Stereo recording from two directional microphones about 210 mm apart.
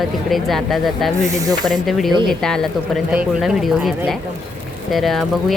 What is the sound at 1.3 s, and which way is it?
Speech, 15° right (ahead or behind).